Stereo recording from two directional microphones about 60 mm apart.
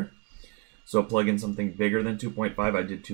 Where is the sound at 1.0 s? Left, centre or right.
Left.